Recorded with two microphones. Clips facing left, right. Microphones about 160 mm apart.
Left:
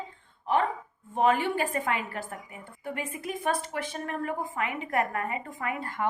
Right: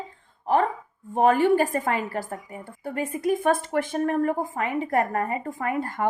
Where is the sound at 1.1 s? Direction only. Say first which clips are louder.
Right 6 dB; 45° right (ahead or behind).